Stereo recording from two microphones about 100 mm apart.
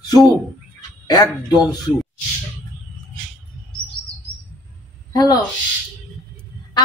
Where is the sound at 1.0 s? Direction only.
40° left (ahead or behind).